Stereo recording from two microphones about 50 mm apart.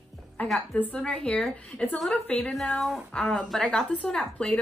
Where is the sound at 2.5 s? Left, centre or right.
Centre.